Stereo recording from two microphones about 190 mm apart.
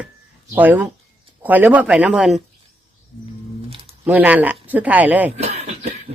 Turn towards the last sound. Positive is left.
turn(degrees=-35)  # may be behind; listen again after turning